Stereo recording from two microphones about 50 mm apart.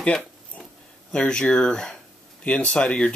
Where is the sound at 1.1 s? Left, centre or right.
Centre.